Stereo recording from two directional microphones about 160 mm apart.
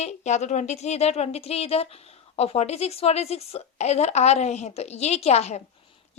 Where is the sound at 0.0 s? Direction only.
45° left (ahead or behind).